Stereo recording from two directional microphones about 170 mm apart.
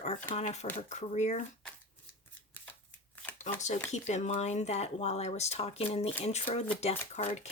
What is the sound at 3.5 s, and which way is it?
Speech, 45° left (ahead or behind).